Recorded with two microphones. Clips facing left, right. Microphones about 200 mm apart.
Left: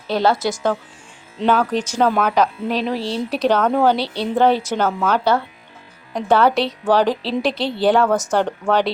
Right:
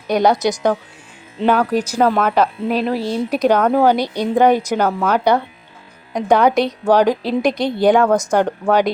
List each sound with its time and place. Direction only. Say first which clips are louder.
0.1 s speech: right 3 dB; 15° right (ahead or behind)